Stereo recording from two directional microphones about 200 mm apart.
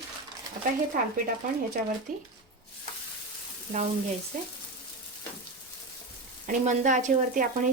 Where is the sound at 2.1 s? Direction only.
40° right (ahead or behind).